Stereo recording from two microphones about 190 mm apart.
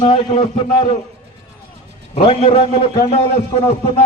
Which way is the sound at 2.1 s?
30° left (ahead or behind).